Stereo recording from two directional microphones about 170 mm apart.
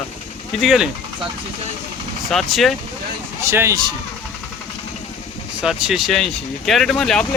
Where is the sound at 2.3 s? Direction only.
Centre (ahead or behind).